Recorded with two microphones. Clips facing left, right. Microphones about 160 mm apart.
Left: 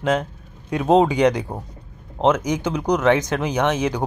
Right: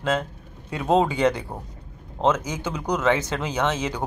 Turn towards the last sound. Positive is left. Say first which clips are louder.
# left 4 dB
turn(degrees=15)  # may be behind; listen again after turning